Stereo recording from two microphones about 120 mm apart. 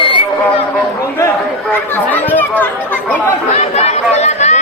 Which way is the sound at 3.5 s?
65° left (ahead or behind).